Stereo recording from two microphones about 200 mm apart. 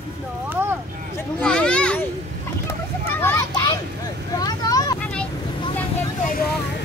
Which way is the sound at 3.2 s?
15° left (ahead or behind).